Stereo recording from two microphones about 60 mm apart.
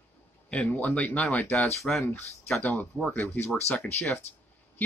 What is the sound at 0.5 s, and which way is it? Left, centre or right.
Speech, centre.